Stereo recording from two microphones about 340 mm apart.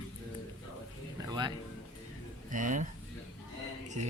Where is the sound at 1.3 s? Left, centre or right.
Centre.